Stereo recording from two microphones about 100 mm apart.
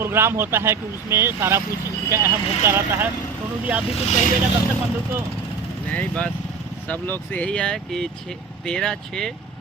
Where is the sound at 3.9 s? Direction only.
90° left.